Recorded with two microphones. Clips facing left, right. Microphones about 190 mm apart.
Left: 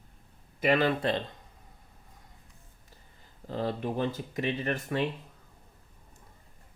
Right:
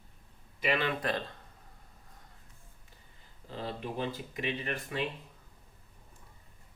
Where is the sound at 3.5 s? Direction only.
45° left (ahead or behind).